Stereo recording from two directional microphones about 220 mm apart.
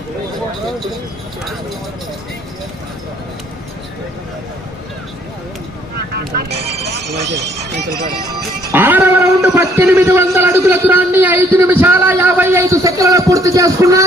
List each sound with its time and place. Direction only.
6.1 s speech: 50° right (ahead or behind)
8.3 s speech: 10° right (ahead or behind)